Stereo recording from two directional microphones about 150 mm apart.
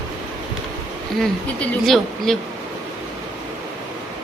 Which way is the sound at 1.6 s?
Centre (ahead or behind).